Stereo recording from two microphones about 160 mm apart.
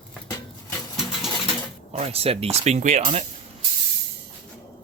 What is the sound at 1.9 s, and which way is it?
Speech, 40° right (ahead or behind).